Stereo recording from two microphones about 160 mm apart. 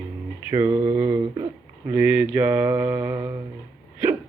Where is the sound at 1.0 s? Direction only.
25° right (ahead or behind).